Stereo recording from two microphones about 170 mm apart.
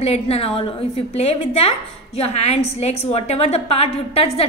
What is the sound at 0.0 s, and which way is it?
A woman's voice, 35° left (ahead or behind).